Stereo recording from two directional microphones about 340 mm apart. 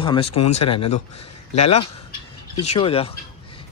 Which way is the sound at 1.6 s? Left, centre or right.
Centre.